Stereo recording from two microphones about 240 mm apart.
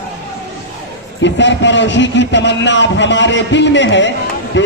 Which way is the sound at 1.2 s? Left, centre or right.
Left.